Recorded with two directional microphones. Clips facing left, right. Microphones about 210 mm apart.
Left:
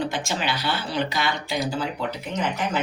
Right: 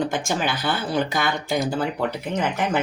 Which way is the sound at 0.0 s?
50° right (ahead or behind).